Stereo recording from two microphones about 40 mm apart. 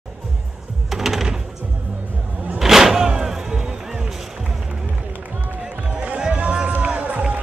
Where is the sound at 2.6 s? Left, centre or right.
Centre.